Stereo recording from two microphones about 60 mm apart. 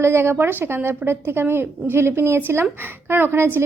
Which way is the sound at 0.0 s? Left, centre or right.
Right.